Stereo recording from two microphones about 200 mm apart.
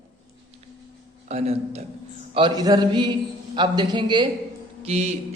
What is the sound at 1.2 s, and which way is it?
Speech, 30° right (ahead or behind).